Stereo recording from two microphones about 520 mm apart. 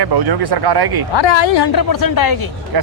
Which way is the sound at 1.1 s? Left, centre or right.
Left.